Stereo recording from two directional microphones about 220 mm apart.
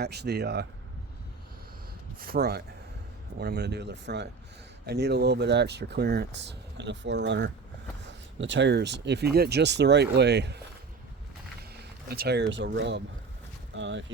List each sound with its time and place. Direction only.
0.0 s speech: 50° right (ahead or behind)
2.1 s speech: 45° right (ahead or behind)
11.8 s speech: 45° right (ahead or behind)